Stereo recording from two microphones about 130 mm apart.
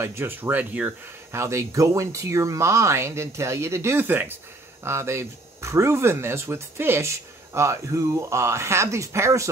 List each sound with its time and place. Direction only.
0.0 s speech: 15° right (ahead or behind)